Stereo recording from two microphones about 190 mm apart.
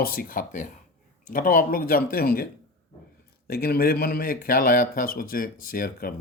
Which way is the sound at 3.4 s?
55° left (ahead or behind).